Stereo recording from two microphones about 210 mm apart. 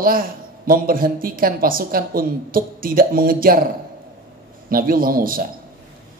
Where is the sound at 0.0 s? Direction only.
45° right (ahead or behind).